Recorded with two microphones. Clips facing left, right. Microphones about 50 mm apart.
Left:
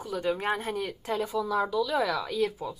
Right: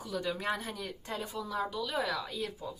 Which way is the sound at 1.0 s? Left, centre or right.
Left.